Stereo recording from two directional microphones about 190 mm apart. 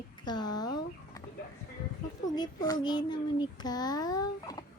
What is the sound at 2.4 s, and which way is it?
Child singing, 20° left (ahead or behind).